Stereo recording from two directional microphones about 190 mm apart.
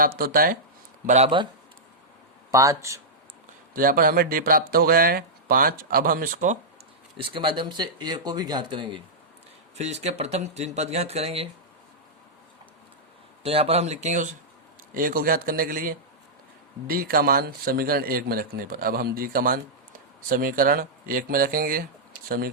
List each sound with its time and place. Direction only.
0.0 s a man's voice: 50° right (ahead or behind)
1.0 s speech: 35° right (ahead or behind)
2.5 s speech: 15° right (ahead or behind)
3.8 s a man's voice: 50° right (ahead or behind)
7.2 s speech: 25° right (ahead or behind)
9.7 s speech: 35° right (ahead or behind)
13.4 s a man's voice: 30° right (ahead or behind); by 22.4 s 50° right (ahead or behind)